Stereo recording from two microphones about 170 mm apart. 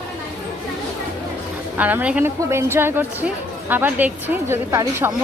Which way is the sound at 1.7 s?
10° right (ahead or behind).